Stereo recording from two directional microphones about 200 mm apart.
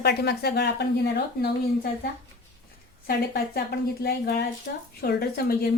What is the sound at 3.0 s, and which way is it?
A woman's voice, 50° left (ahead or behind).